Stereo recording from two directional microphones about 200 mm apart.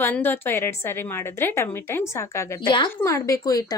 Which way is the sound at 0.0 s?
10° left (ahead or behind).